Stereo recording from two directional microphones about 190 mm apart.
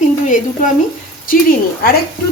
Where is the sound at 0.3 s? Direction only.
45° left (ahead or behind).